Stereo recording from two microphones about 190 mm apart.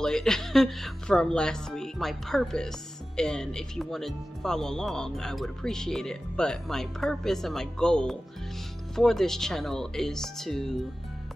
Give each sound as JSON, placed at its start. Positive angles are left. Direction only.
{"t": 0.0, "sound": "speech", "side_deg": 5}